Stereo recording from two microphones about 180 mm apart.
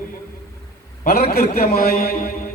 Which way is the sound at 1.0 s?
60° left (ahead or behind).